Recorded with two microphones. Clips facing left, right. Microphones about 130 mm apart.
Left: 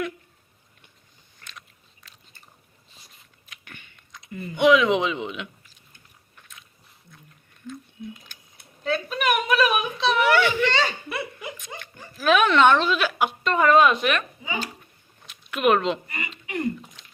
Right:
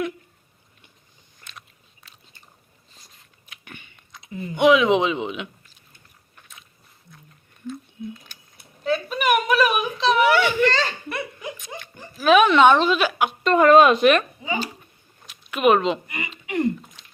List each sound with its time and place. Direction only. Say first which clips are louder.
3.5 s biting: right 3 dB; 15° right (ahead or behind)
4.3 s speech: right 1 dB; 15° right (ahead or behind)
8.8 s a woman's voice: right 2 dB; centre (ahead or behind)
10.7 s a woman's voice: right 1 dB; 5° left (ahead or behind)
12.1 s speech: right 4 dB; 10° right (ahead or behind)
13.4 s a woman's voice: right 4 dB; 45° right (ahead or behind)
13.9 s a woman's voice: right 8 dB; 35° right (ahead or behind)
15.3 s a sound: right 3 dB; 10° right (ahead or behind)
16.1 s speech: right 5 dB; 20° right (ahead or behind)